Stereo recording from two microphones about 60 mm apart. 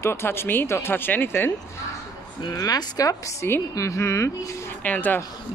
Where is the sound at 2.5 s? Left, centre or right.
Left.